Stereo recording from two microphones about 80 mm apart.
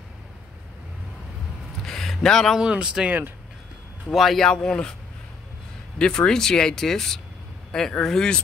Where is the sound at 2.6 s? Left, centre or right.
Centre.